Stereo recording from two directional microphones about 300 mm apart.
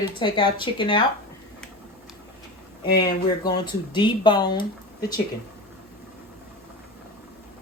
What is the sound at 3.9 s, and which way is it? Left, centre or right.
Speech, centre.